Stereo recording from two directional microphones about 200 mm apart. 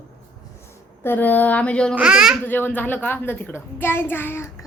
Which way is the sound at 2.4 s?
10° left (ahead or behind).